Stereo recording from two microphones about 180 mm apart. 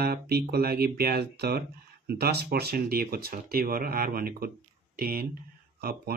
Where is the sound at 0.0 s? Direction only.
60° right (ahead or behind).